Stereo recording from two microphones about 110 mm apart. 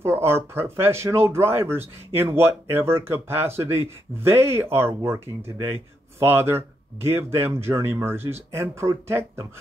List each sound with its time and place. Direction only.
0.0 s speech: 20° right (ahead or behind)